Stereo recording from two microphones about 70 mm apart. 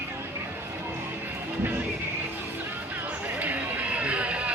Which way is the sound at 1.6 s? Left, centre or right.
Right.